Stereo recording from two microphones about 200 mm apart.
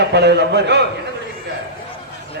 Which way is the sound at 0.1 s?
55° right (ahead or behind).